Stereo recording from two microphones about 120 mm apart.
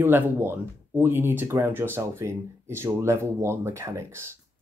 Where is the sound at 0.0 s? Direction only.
20° right (ahead or behind).